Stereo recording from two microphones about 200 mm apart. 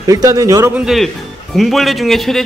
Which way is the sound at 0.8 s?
Centre (ahead or behind).